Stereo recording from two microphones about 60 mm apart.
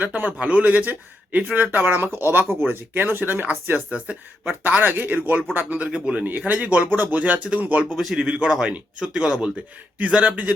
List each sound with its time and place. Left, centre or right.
0.0 s speech: right
3.8 s speech: right
4.9 s speech: right
5.9 s speech: centre
7.9 s speech: centre
8.3 s speech: centre
10.0 s speech: right